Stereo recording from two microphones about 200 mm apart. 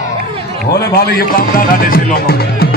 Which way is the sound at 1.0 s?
50° left (ahead or behind).